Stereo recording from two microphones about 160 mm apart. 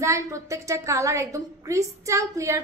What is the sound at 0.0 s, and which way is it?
A woman's voice, 20° right (ahead or behind).